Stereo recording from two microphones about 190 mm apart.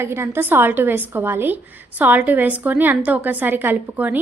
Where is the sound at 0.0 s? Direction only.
10° right (ahead or behind).